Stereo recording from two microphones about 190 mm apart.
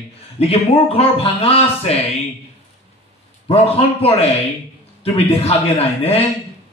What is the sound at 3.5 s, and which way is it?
A man's voice, 30° left (ahead or behind).